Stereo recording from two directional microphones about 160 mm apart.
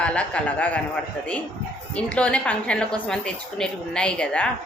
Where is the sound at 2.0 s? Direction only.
5° left (ahead or behind).